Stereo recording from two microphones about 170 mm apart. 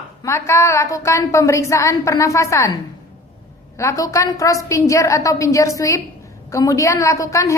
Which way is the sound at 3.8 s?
15° left (ahead or behind).